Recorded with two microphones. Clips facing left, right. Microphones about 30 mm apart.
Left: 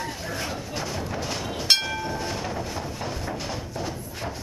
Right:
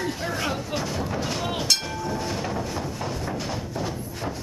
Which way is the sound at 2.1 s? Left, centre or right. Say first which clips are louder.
Right 1 dB; centre.